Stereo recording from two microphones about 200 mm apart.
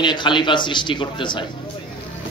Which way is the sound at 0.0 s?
25° left (ahead or behind).